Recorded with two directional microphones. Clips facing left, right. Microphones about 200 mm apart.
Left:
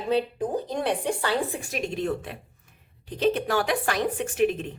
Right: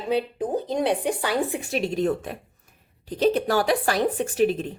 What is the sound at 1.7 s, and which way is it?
Speech, 35° right (ahead or behind).